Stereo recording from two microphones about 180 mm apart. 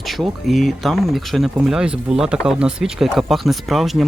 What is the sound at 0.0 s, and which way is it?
Speech, centre (ahead or behind).